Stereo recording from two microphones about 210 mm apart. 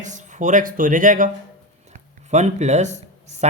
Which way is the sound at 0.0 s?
35° right (ahead or behind).